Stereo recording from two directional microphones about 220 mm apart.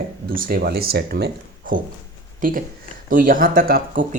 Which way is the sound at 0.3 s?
40° right (ahead or behind).